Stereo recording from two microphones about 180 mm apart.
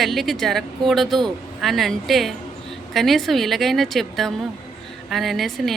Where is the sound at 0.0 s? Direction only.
Centre (ahead or behind).